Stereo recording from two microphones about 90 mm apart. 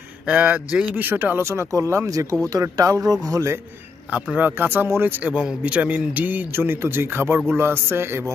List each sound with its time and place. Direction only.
0.3 s a man's voice: 15° right (ahead or behind); by 3.5 s 40° right (ahead or behind)
4.1 s a man's voice: 15° right (ahead or behind)